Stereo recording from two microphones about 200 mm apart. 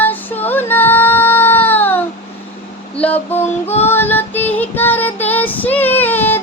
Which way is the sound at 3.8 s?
10° left (ahead or behind).